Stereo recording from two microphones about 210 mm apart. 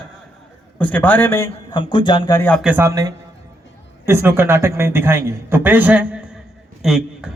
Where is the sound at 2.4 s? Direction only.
5° left (ahead or behind).